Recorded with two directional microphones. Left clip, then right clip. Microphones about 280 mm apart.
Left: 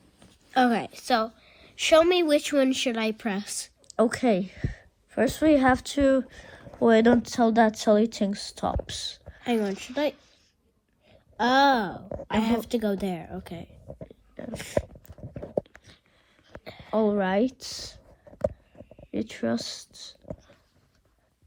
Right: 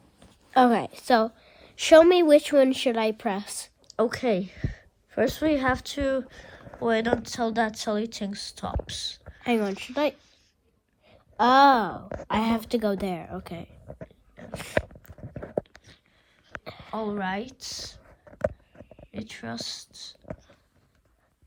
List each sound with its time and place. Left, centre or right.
0.5 s a woman's voice: right
3.9 s speech: centre
9.5 s a woman's voice: right
12.0 s speech: left
12.4 s a woman's voice: right
14.1 s dog: centre
14.8 s a sound: left
16.6 s a sound: right
16.9 s speech: centre
18.0 s a sound: left
19.1 s speech: centre